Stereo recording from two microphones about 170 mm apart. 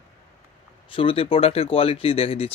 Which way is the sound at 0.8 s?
35° left (ahead or behind).